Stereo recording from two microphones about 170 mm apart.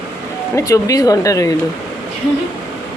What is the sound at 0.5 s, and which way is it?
Speech, 20° left (ahead or behind).